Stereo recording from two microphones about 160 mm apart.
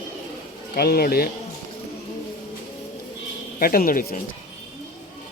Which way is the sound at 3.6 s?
65° left (ahead or behind).